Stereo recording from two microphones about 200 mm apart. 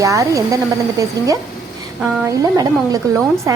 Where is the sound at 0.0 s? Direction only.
15° right (ahead or behind).